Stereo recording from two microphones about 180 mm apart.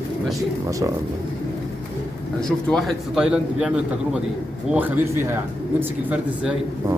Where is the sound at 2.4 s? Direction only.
5° left (ahead or behind).